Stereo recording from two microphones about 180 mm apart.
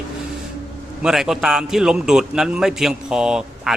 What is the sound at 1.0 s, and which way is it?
Speech, centre (ahead or behind).